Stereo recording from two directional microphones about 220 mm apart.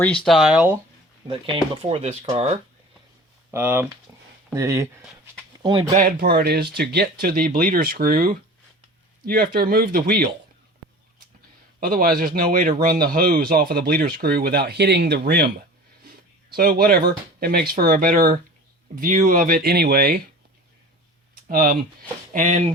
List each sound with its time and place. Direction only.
0.3 s speech: centre (ahead or behind)
1.3 s speech: 25° right (ahead or behind)
3.5 s speech: 10° right (ahead or behind)
4.1 s a sound: 10° right (ahead or behind)
4.5 s speech: 15° right (ahead or behind)
6.0 s speech: 40° right (ahead or behind)
11.8 s speech: 40° right (ahead or behind)
21.4 s speech: 40° right (ahead or behind)